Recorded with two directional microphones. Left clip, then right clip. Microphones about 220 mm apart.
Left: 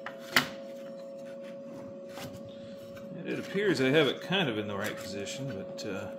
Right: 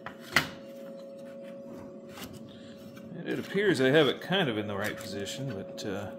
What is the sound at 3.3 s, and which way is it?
Speech, 15° right (ahead or behind).